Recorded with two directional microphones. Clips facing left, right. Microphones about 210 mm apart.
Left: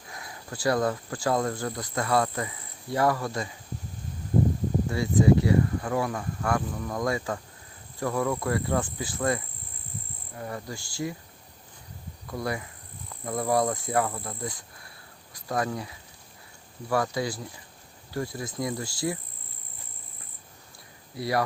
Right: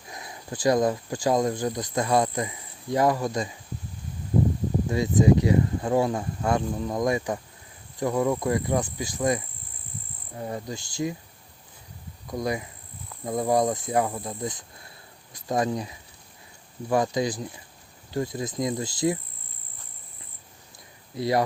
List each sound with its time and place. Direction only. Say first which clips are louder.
0.1 s speech: right 3 dB; 20° right (ahead or behind)
4.9 s speech: right 1 dB; 20° right (ahead or behind)
7.9 s cricket: right 3 dB; 20° right (ahead or behind)
10.3 s speech: right 3 dB; 20° right (ahead or behind)
12.3 s cricket: right 3 dB; 15° right (ahead or behind)
13.2 s speech: right 2 dB; 20° right (ahead or behind)
21.2 s speech: right 3 dB; 20° right (ahead or behind)